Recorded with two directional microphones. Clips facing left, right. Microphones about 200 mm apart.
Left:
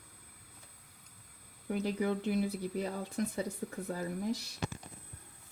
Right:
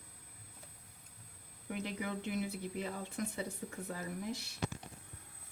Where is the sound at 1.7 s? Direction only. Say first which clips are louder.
Left 7 dB; 35° left (ahead or behind).